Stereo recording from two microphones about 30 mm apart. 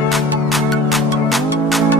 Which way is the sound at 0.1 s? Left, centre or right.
Centre.